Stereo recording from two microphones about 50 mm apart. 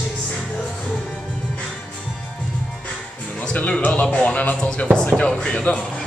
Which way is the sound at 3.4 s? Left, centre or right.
Left.